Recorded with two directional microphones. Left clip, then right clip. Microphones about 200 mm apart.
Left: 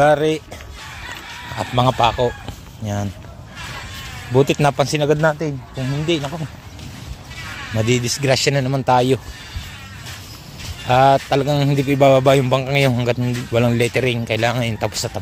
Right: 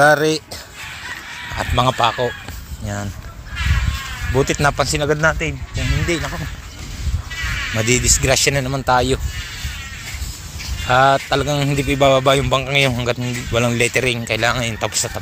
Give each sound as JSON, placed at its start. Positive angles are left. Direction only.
{"t": 0.0, "sound": "speech", "side_deg": 0}
{"t": 1.8, "sound": "a man's voice", "side_deg": 20}
{"t": 4.4, "sound": "a man's voice", "side_deg": 30}
{"t": 5.8, "sound": "speech", "side_deg": 45}
{"t": 6.0, "sound": "speech", "side_deg": 0}
{"t": 7.7, "sound": "speech", "side_deg": 15}
{"t": 10.9, "sound": "a man's voice", "side_deg": 25}